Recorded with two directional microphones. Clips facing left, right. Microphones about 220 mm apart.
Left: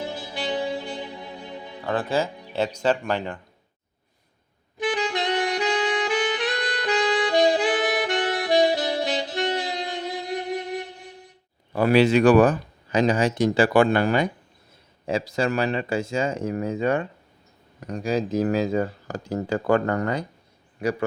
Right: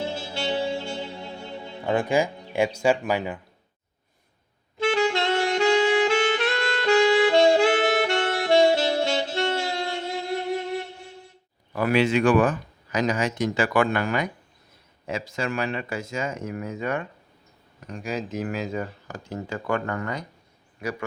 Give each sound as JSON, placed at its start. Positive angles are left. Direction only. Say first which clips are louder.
{"t": 0.3, "sound": "music", "louder": "even", "side_deg": 15}
{"t": 1.8, "sound": "speech", "louder": "right 2 dB", "side_deg": -15}
{"t": 4.8, "sound": "music", "louder": "right 3 dB", "side_deg": 15}
{"t": 11.7, "sound": "speech", "louder": "left 4 dB", "side_deg": 30}